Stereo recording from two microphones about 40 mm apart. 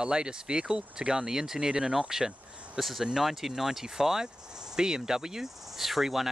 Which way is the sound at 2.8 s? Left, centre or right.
Centre.